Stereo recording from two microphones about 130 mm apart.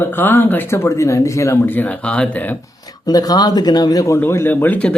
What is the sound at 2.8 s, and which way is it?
Speech, 30° left (ahead or behind).